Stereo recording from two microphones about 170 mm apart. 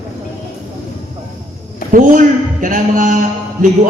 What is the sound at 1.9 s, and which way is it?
Speech, 55° right (ahead or behind).